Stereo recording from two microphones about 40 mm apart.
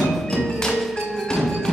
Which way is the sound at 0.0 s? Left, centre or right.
Centre.